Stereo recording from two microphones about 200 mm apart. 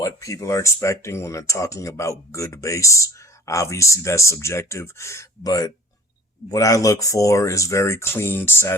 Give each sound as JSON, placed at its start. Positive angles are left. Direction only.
{"t": 0.0, "sound": "speech", "side_deg": 15}